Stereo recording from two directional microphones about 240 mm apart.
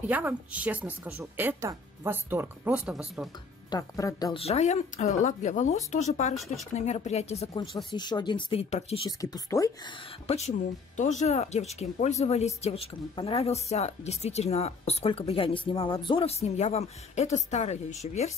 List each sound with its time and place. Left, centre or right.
0.0 s a woman's voice: centre
3.7 s speech: centre
10.2 s speech: left